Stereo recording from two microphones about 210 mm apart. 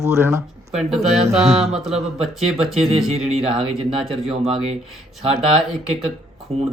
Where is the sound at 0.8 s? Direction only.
Centre (ahead or behind).